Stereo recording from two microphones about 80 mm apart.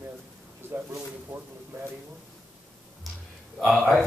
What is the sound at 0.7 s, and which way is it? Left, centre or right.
Speech, right.